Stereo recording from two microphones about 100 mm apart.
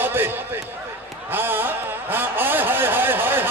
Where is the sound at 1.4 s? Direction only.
20° right (ahead or behind).